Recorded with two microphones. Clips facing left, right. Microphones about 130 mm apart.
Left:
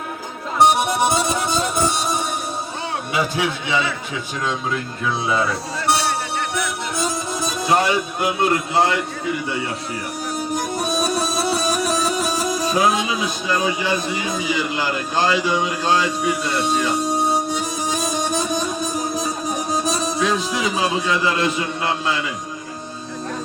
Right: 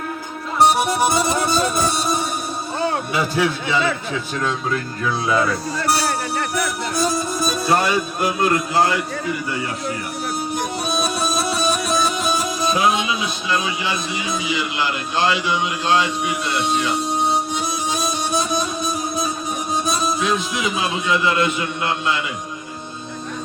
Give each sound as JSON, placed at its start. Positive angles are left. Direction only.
{"t": 0.6, "sound": "music", "side_deg": 20}
{"t": 3.3, "sound": "a man's voice", "side_deg": 20}
{"t": 6.9, "sound": "music", "side_deg": 20}
{"t": 10.5, "sound": "music", "side_deg": 40}
{"t": 19.7, "sound": "speech", "side_deg": 40}